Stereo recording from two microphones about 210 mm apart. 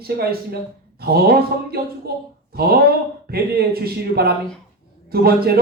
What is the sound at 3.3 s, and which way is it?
A man's voice, 45° right (ahead or behind).